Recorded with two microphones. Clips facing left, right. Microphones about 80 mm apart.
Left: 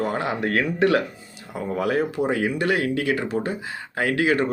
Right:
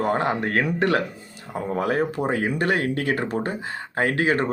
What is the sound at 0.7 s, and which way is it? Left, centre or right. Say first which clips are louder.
Speech: left 2 dB; right.